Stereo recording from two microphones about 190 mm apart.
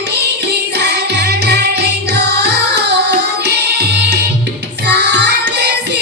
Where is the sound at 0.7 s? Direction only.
60° right (ahead or behind).